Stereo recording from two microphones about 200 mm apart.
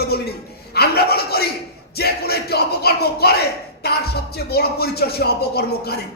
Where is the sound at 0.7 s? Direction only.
55° left (ahead or behind).